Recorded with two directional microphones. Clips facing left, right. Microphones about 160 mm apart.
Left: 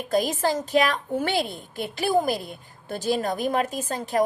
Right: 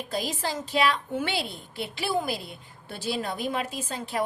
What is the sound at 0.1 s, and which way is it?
A woman's voice, 45° left (ahead or behind).